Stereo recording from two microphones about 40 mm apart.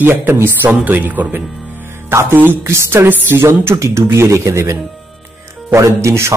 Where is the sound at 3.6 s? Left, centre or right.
Right.